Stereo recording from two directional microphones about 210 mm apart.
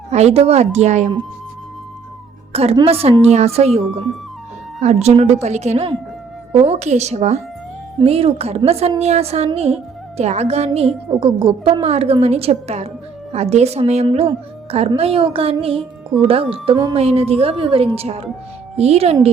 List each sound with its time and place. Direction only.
0.1 s a woman's voice: 30° right (ahead or behind)
2.5 s a woman's voice: 30° right (ahead or behind)